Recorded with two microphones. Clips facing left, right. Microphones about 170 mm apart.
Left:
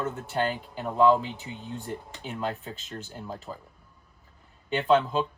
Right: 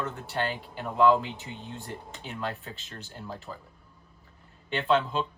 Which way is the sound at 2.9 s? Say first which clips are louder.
Left 3 dB; 20° left (ahead or behind).